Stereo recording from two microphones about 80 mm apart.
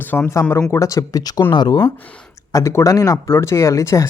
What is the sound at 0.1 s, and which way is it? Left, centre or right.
Speech, centre.